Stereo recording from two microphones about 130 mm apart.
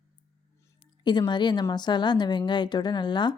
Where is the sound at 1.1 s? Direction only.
35° left (ahead or behind).